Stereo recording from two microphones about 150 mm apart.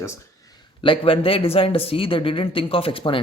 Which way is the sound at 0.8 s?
35° left (ahead or behind).